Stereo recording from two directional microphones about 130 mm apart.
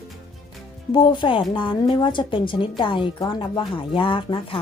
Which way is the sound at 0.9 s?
35° left (ahead or behind).